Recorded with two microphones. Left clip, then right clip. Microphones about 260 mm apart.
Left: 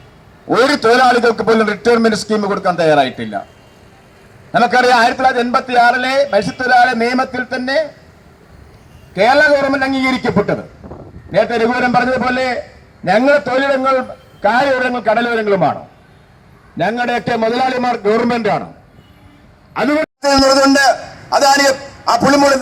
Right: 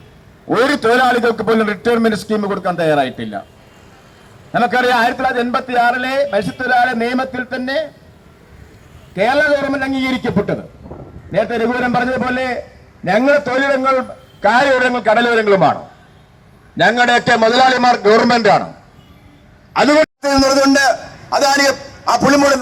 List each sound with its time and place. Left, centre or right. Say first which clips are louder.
0.4 s a man's voice: left 2 dB; centre
2.7 s a man's voice: left 3 dB; centre
4.5 s a man's voice: left 3 dB; centre
4.9 s a man's voice: left 3 dB; centre
6.3 s a man's voice: left 3 dB; centre
9.1 s a man's voice: left 3 dB; centre
16.7 s a man's voice: right 5 dB; centre
20.2 s a man's voice: left 2 dB; centre